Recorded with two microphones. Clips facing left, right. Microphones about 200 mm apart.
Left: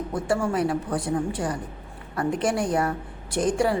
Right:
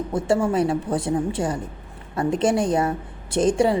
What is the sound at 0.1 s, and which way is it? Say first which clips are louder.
A woman's voice: right 4 dB; 25° right (ahead or behind).